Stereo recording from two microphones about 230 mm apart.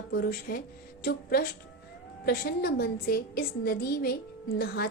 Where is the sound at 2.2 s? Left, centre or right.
Left.